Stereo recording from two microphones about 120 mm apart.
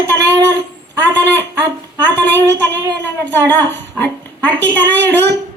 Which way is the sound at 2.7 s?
35° right (ahead or behind).